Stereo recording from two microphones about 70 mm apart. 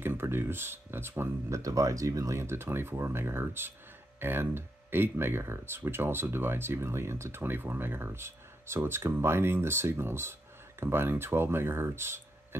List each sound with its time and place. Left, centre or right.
0.0 s speech: right
1.5 s speech: right